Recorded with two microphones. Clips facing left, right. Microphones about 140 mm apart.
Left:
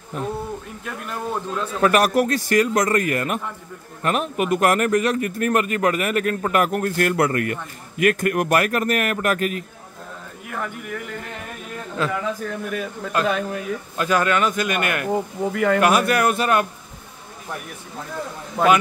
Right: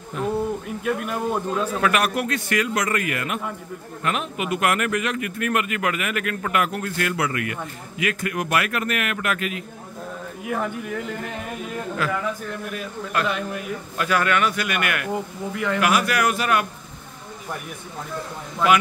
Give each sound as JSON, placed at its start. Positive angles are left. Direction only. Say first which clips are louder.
{"t": 1.0, "sound": "speech", "louder": "right 3 dB", "side_deg": -10}
{"t": 1.8, "sound": "a man's voice", "louder": "left 8 dB", "side_deg": 40}
{"t": 10.5, "sound": "speech", "louder": "right 3 dB", "side_deg": -20}
{"t": 12.0, "sound": "speech", "louder": "left 3 dB", "side_deg": 25}
{"t": 15.5, "sound": "a man's voice", "louder": "left 6 dB", "side_deg": 55}
{"t": 15.8, "sound": "speech", "louder": "even", "side_deg": 30}
{"t": 18.6, "sound": "a man's voice", "louder": "left 3 dB", "side_deg": 50}